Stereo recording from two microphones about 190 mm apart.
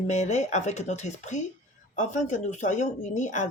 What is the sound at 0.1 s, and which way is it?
Speech, 35° left (ahead or behind).